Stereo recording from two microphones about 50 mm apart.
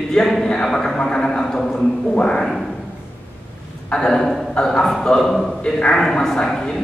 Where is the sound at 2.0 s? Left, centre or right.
Centre.